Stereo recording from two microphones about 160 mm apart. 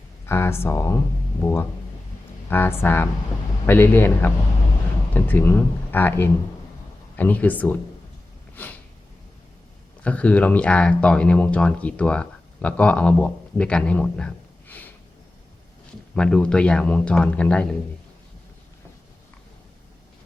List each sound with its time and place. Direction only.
0.3 s a man's voice: 15° left (ahead or behind)
10.0 s speech: 10° left (ahead or behind)
16.1 s a man's voice: 5° left (ahead or behind)